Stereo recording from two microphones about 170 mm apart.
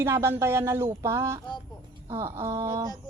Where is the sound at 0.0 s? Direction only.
15° right (ahead or behind).